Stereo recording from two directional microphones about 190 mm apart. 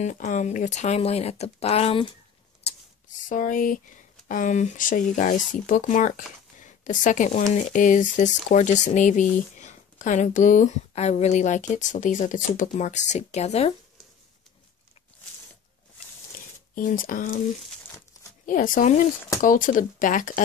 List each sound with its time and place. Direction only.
0.0 s speech: 40° left (ahead or behind)
3.3 s speech: 45° left (ahead or behind)
17.0 s speech: 50° left (ahead or behind)
18.4 s speech: 45° left (ahead or behind)